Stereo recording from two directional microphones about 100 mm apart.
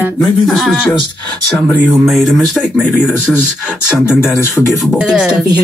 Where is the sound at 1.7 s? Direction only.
15° right (ahead or behind).